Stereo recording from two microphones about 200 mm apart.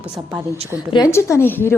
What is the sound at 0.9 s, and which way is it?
Speech, 15° left (ahead or behind).